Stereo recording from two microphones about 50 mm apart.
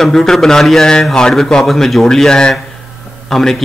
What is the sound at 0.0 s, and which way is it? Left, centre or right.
A man's voice, centre.